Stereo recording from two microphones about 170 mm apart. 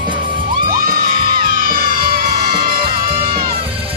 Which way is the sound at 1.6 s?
55° right (ahead or behind).